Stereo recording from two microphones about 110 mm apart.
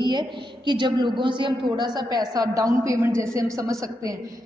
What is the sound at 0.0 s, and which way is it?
A woman's voice, 40° right (ahead or behind).